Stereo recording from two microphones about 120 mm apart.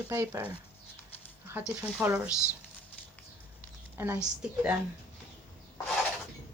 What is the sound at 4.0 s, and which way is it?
Speech, 20° right (ahead or behind).